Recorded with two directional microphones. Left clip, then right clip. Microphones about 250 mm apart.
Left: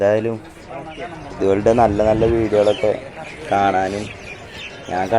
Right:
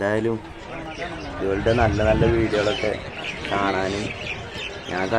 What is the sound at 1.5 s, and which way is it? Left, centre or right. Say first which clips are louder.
Speech: left 6 dB; centre.